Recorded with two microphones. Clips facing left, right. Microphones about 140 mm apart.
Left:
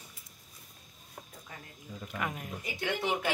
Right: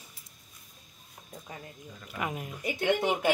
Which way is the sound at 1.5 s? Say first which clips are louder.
Right 5 dB; 20° right (ahead or behind).